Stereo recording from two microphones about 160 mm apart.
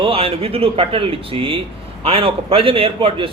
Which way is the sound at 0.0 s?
35° right (ahead or behind).